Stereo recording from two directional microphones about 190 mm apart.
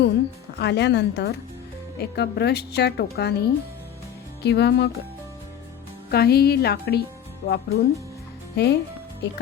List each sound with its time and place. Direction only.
0.6 s a woman's voice: 65° left (ahead or behind)
4.4 s a woman's voice: 60° left (ahead or behind)
6.1 s a woman's voice: 55° left (ahead or behind)